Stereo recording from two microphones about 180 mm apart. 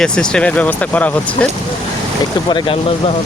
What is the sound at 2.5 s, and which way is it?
Speech, 25° left (ahead or behind).